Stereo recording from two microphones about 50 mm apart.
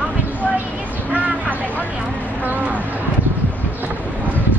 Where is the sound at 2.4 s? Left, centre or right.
Right.